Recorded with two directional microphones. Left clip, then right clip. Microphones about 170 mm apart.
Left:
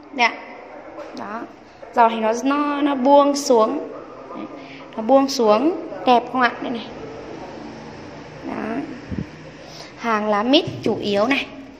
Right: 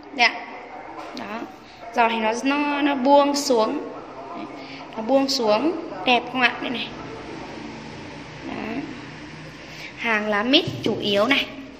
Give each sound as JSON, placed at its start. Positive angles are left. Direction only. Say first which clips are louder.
{"t": 0.2, "sound": "a woman's voice", "louder": "left 1 dB", "side_deg": 25}
{"t": 2.0, "sound": "a woman's voice", "louder": "left 4 dB", "side_deg": 20}
{"t": 5.0, "sound": "a woman's voice", "louder": "left 4 dB", "side_deg": 30}
{"t": 8.5, "sound": "a sound", "louder": "left 4 dB", "side_deg": 15}
{"t": 10.0, "sound": "a woman's voice", "louder": "left 2 dB", "side_deg": 25}